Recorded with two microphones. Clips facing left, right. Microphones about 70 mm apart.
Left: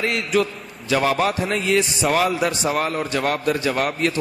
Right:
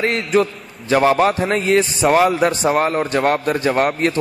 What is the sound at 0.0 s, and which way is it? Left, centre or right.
A man's voice, right.